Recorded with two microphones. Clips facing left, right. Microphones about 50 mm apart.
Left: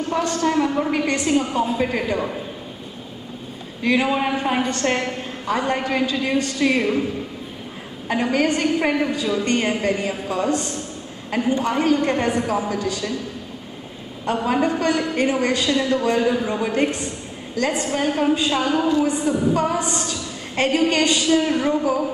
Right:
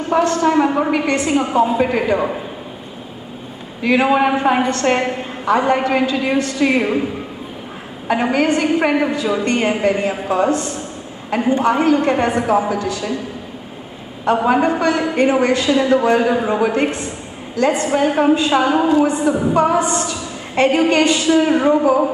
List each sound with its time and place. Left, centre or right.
0.4 s a woman's voice: centre
1.1 s a woman's voice: centre
3.8 s a woman's voice: centre
8.1 s a woman's voice: centre
10.5 s a man's voice: centre
11.4 s a woman's voice: right
11.7 s a woman's voice: centre
14.3 s a woman's voice: right
16.7 s a woman's voice: centre
17.8 s a woman's voice: centre
18.9 s a man's voice: right
19.1 s a woman's voice: centre
19.5 s a woman's voice: right
19.8 s a man's voice: centre